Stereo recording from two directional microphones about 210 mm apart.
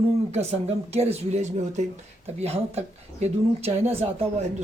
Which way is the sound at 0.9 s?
30° right (ahead or behind).